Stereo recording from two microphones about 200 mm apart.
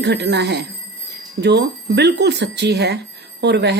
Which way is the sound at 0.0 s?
55° right (ahead or behind).